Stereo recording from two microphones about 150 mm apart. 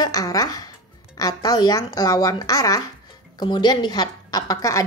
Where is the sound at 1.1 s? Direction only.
25° left (ahead or behind).